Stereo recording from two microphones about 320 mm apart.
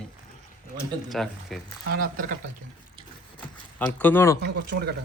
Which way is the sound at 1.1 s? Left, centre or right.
Centre.